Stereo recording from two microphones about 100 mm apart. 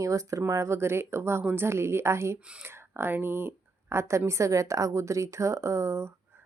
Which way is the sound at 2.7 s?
25° right (ahead or behind).